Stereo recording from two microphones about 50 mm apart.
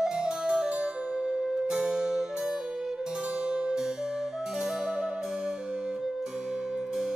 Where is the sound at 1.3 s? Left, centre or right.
Centre.